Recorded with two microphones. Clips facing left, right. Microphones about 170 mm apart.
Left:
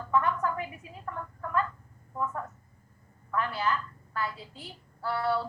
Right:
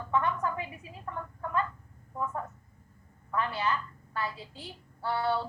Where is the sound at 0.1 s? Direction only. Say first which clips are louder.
Left 2 dB; 25° right (ahead or behind).